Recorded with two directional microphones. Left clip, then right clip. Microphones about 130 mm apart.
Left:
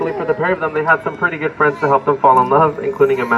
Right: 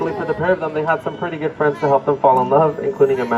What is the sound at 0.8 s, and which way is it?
Speech, 65° left (ahead or behind).